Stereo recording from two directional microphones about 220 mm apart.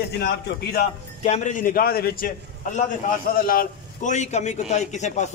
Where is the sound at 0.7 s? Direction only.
40° left (ahead or behind).